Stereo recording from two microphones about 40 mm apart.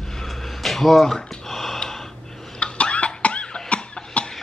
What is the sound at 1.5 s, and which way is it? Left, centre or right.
Gasp, centre.